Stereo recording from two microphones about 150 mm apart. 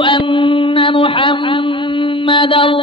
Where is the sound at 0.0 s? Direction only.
35° left (ahead or behind).